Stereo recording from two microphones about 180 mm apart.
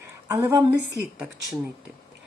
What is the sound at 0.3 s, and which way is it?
Speech, 15° right (ahead or behind).